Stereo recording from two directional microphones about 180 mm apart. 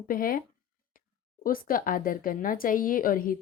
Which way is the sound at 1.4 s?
50° left (ahead or behind).